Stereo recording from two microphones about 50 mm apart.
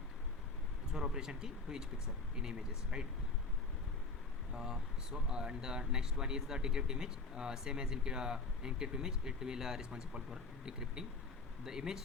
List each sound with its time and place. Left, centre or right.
0.9 s speech: centre
4.5 s speech: centre